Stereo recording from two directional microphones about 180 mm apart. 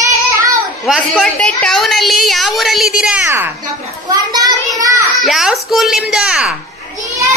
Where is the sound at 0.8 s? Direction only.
5° right (ahead or behind); by 4.6 s 20° right (ahead or behind).